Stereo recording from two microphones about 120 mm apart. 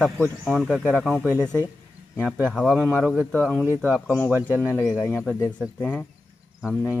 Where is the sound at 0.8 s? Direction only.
10° left (ahead or behind).